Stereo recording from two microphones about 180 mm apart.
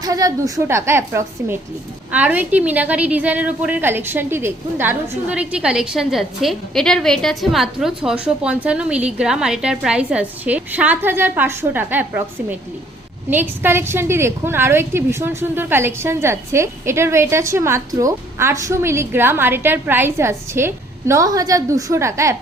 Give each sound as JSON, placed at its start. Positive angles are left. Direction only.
{"t": 0.0, "sound": "a woman's voice", "side_deg": -20}